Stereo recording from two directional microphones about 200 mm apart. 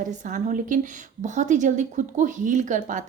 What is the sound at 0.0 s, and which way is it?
A woman's voice, 40° right (ahead or behind).